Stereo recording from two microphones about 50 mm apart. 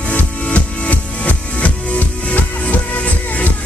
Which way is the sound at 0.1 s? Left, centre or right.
Left.